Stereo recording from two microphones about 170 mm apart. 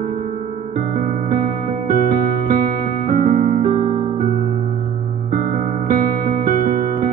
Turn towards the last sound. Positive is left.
turn(degrees=-50)  # may be behind; listen again after turning